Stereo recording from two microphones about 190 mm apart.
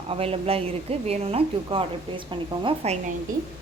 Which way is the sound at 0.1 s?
30° right (ahead or behind).